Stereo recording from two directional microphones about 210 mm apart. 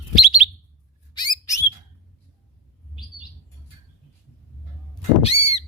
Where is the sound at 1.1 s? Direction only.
20° left (ahead or behind).